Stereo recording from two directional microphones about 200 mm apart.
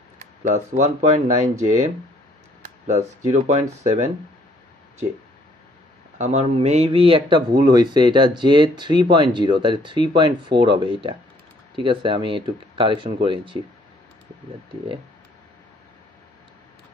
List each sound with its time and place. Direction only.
0.2 s a sound: 40° right (ahead or behind)
0.7 s speech: 35° right (ahead or behind)
2.9 s speech: 40° right (ahead or behind)
6.1 s speech: 35° right (ahead or behind)